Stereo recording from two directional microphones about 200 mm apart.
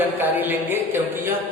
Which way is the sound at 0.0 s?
10° right (ahead or behind).